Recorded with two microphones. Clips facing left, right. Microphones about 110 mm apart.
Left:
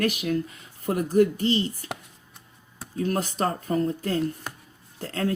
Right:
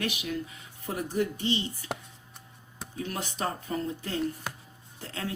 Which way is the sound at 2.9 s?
40° left (ahead or behind).